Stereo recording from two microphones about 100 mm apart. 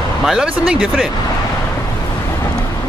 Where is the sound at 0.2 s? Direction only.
5° right (ahead or behind).